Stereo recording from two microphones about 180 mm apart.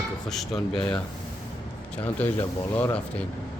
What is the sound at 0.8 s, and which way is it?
Speech, 25° left (ahead or behind).